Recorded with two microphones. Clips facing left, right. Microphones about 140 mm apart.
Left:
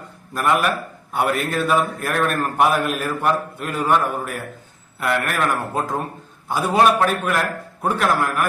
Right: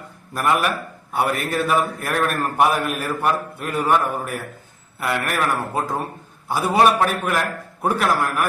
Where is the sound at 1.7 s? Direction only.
10° right (ahead or behind).